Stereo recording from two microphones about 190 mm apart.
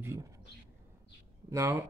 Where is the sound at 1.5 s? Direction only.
15° right (ahead or behind).